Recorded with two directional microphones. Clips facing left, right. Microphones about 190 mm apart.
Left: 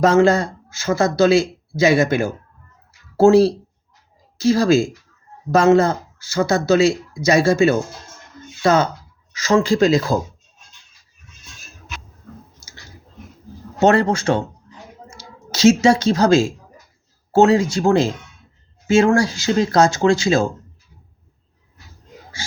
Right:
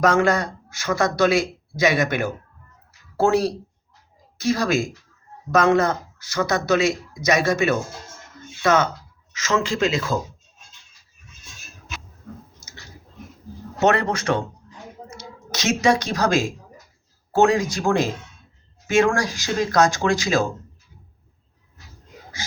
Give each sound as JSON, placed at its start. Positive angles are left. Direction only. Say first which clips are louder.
{"t": 0.0, "sound": "speech", "louder": "left 5 dB", "side_deg": 25}
{"t": 13.7, "sound": "a woman's voice", "louder": "left 5 dB", "side_deg": 30}